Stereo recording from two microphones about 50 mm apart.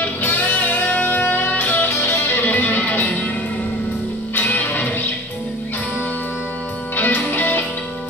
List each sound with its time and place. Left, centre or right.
0.0 s music: left
1.9 s music: left
2.2 s music: left
2.7 s music: left
3.0 s music: left
4.4 s music: left
7.0 s music: left